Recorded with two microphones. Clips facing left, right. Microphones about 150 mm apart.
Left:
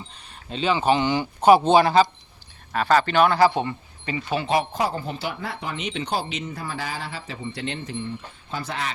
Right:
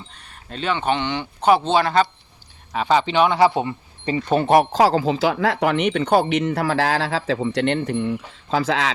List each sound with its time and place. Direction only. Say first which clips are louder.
0.1 s speech: left 2 dB; centre (ahead or behind)
2.7 s speech: right 1 dB; 15° right (ahead or behind)
3.2 s speech: right 1 dB; 5° left (ahead or behind)
4.3 s speech: right 7 dB; 55° right (ahead or behind)
8.4 s speech: right 10 dB; 90° right